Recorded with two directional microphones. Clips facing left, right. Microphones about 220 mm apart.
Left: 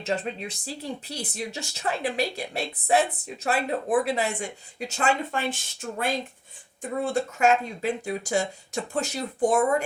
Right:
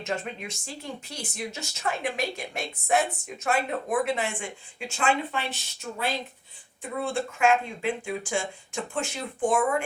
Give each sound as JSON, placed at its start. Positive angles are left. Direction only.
{"t": 0.0, "sound": "speech", "side_deg": 35}
{"t": 7.0, "sound": "speech", "side_deg": 40}